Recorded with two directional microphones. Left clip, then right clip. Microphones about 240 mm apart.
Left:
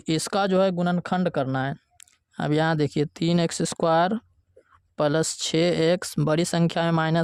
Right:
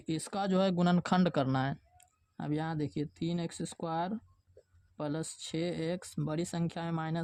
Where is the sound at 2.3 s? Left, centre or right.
Left.